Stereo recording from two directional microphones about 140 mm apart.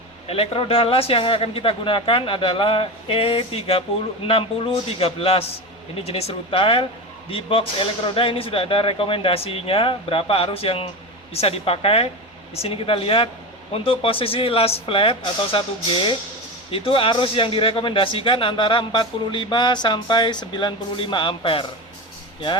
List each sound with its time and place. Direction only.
0.3 s a man's voice: 45° left (ahead or behind)